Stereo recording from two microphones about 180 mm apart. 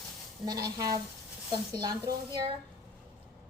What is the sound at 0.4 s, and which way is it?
A woman's voice, 20° right (ahead or behind).